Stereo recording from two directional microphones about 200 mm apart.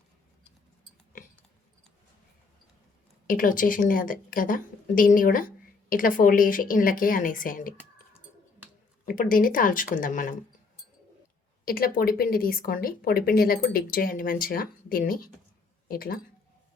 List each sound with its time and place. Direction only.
3.2 s a woman's voice: 45° left (ahead or behind)
9.0 s a woman's voice: 45° left (ahead or behind)
11.6 s a woman's voice: 45° left (ahead or behind)